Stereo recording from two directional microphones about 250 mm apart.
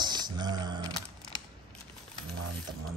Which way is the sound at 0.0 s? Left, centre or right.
Centre.